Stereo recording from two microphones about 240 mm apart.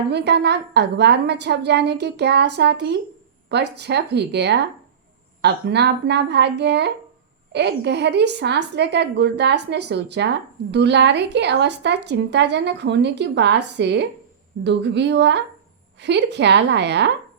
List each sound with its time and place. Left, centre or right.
0.1 s a woman's voice: right